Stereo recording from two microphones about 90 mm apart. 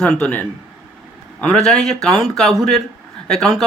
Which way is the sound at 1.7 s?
5° left (ahead or behind).